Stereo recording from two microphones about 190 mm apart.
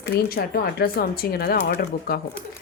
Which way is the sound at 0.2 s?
55° left (ahead or behind).